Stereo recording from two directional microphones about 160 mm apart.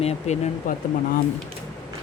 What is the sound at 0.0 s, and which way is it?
Speech, 40° left (ahead or behind).